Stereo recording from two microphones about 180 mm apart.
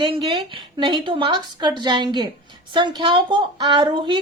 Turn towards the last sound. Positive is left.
turn(degrees=-25)  # may be behind; listen again after turning